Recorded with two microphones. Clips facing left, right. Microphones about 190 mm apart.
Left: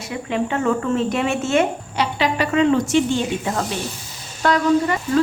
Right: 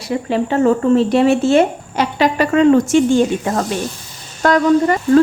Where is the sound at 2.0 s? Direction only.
45° right (ahead or behind).